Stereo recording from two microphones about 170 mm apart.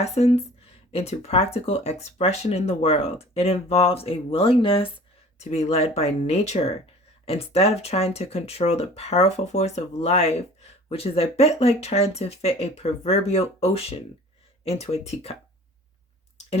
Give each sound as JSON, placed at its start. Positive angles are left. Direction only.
{"t": 0.0, "sound": "speech", "side_deg": 40}